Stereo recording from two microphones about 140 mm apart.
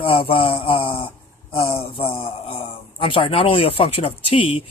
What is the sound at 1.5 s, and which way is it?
Speech, 40° left (ahead or behind).